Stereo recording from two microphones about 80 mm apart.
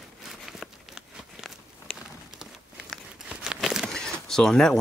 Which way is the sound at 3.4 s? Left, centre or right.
Centre.